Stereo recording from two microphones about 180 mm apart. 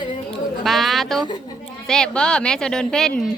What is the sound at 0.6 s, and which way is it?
Speech, centre (ahead or behind).